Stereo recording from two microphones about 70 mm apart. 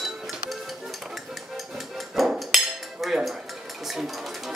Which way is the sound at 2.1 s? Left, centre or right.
Centre.